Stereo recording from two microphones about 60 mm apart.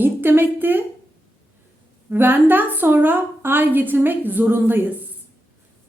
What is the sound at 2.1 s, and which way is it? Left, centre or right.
A woman's voice, right.